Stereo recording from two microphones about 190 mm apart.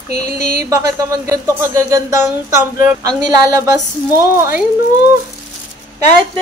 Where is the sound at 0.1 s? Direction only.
55° right (ahead or behind).